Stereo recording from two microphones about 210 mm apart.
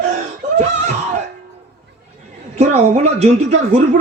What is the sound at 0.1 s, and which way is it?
Laughter, 35° right (ahead or behind).